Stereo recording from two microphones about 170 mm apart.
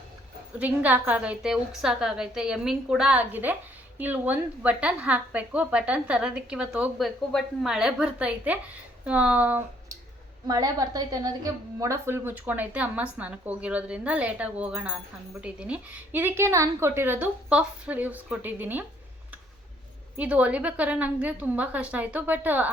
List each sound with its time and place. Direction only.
0.6 s a woman's voice: 10° right (ahead or behind)
10.4 s a woman's voice: 20° right (ahead or behind)
20.1 s a woman's voice: 10° right (ahead or behind)